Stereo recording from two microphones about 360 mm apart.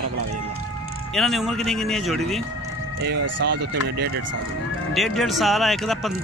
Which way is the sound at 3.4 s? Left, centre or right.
Right.